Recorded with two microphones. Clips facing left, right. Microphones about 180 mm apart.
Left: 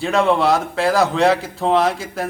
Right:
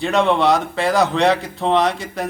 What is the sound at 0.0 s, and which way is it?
Speech, centre (ahead or behind).